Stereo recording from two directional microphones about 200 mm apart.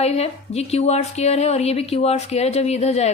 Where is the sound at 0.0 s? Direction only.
30° left (ahead or behind).